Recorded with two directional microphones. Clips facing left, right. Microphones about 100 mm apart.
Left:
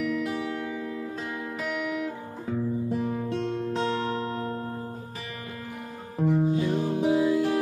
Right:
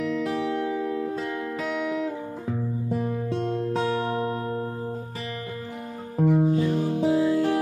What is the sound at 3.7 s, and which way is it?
Music, 15° right (ahead or behind).